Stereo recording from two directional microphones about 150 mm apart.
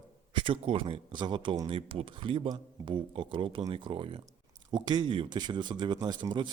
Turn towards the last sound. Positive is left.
turn(degrees=-30)  # may be behind; listen again after turning